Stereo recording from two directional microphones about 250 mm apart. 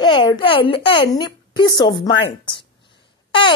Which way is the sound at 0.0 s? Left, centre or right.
Centre.